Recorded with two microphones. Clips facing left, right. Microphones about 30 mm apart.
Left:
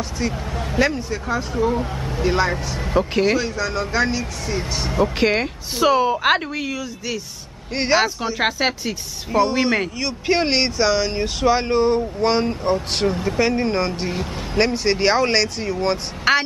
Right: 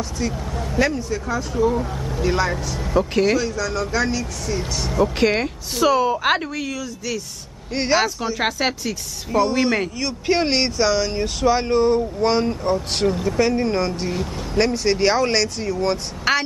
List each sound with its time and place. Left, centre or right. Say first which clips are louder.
0.2 s speech: left 1 dB; left
3.4 s speech: even; left
5.2 s speech: even; centre